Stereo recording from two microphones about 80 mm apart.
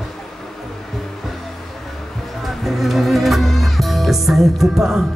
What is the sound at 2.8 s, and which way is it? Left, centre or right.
Music, centre.